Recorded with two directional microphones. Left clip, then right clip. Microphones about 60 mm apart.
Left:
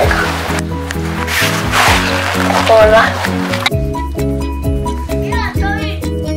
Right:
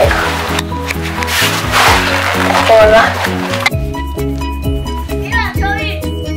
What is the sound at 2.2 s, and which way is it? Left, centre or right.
Music, centre.